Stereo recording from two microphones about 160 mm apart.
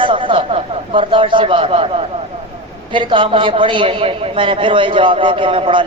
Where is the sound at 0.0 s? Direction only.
30° right (ahead or behind).